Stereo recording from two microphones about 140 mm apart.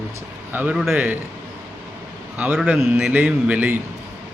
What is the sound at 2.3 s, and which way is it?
Speech, 10° right (ahead or behind).